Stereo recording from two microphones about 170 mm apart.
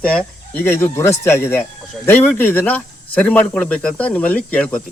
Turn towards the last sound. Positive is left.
turn(degrees=10)  # may be behind; listen again after turning